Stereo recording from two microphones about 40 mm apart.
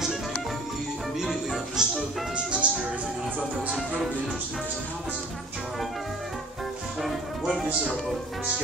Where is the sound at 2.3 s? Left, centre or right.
Right.